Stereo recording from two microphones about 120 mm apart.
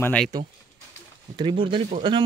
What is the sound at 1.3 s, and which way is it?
Speech, 45° right (ahead or behind).